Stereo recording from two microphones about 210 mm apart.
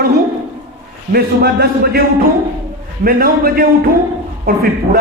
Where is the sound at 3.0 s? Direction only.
45° right (ahead or behind).